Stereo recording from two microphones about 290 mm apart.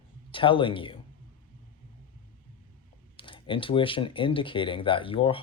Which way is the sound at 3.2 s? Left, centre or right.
Centre.